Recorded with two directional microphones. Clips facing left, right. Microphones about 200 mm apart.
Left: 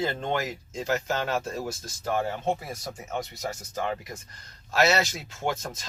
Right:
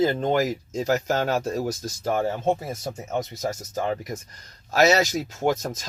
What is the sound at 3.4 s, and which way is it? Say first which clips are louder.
Speech: right 4 dB; 40° right (ahead or behind).